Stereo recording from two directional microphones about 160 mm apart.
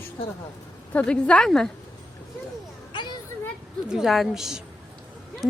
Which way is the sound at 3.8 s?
Centre (ahead or behind).